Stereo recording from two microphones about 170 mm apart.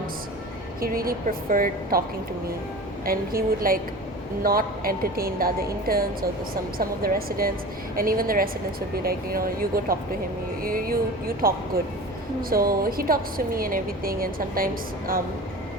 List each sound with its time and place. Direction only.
0.8 s a woman's voice: 60° right (ahead or behind)
3.1 s a woman's voice: 60° right (ahead or behind)